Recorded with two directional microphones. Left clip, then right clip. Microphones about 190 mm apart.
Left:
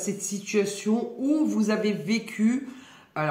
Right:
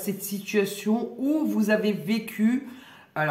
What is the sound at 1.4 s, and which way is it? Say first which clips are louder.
Speech: right 4 dB; 30° right (ahead or behind).